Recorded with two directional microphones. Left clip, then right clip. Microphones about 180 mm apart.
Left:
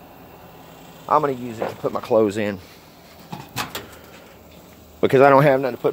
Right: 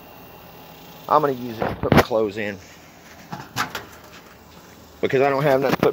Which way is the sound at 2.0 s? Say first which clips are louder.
Left 4 dB; 50° left (ahead or behind).